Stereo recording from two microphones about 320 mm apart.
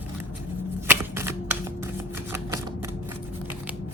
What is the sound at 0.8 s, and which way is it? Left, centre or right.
Shuffling cards, centre.